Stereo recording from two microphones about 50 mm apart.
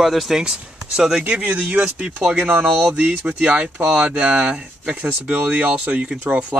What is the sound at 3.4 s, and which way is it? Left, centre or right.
Speech, right.